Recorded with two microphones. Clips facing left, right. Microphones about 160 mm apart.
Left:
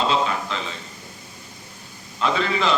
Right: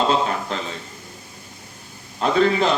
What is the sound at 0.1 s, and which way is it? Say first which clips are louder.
Speech: right 2 dB; 45° right (ahead or behind).